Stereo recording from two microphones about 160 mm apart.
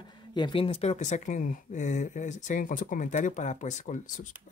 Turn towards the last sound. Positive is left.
turn(degrees=50)  # may be behind; listen again after turning